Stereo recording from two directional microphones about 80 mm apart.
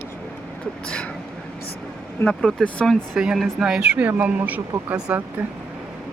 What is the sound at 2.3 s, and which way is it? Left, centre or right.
Speech, centre.